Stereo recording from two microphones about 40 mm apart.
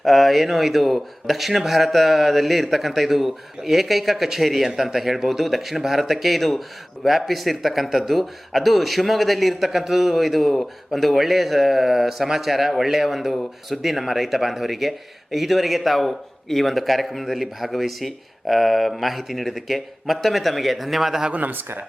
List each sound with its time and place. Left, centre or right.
0.0 s speech: centre
21.3 s speech: right